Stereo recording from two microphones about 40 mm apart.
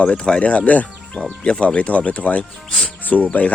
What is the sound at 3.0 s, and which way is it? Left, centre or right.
Cricket, left.